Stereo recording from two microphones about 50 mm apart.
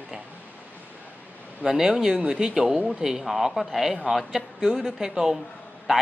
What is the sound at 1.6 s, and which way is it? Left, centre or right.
Speech, centre.